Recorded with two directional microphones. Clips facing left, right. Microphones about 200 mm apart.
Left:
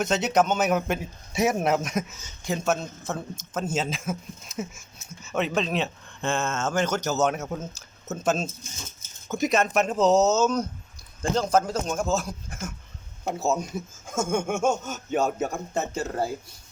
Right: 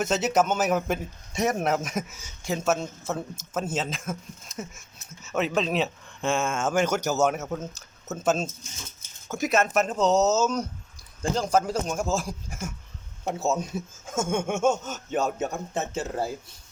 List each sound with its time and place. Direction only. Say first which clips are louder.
0.0 s a man's voice: left 1 dB; 5° right (ahead or behind)